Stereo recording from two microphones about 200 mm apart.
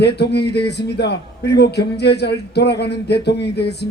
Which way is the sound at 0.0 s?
55° left (ahead or behind).